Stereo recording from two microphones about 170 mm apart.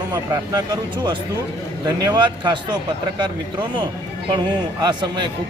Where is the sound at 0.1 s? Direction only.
25° right (ahead or behind).